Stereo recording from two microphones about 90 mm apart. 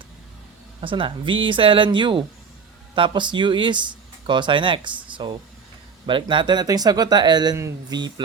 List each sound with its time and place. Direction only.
0.8 s speech: 75° right (ahead or behind); by 8.1 s 50° right (ahead or behind)